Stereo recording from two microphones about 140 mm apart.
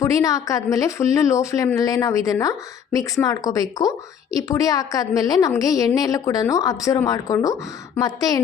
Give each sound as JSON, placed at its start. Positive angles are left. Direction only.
{"t": 0.0, "sound": "a woman's voice", "side_deg": 25}